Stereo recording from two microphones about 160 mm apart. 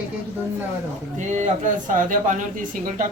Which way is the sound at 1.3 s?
55° right (ahead or behind).